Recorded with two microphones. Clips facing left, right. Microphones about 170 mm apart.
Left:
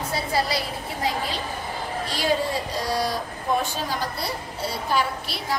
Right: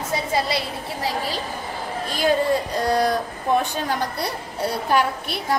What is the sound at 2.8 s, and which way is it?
Speech, 55° right (ahead or behind).